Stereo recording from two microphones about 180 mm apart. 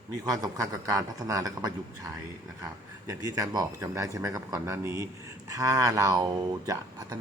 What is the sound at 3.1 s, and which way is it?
A man's voice, 15° right (ahead or behind).